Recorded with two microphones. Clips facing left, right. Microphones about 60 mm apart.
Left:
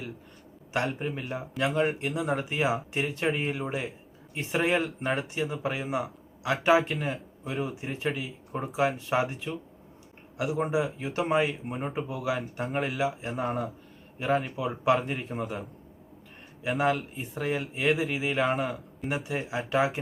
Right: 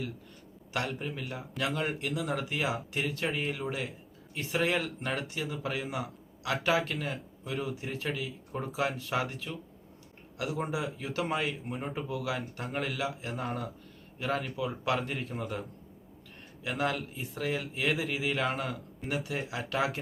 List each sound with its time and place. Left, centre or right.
0.7 s speech: left
16.6 s speech: left
17.2 s a man's voice: centre